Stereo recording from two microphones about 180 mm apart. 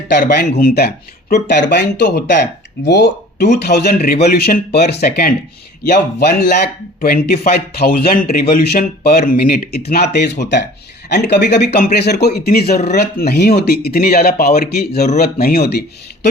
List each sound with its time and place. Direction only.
0.1 s speech: 65° left (ahead or behind)
9.9 s speech: 65° left (ahead or behind)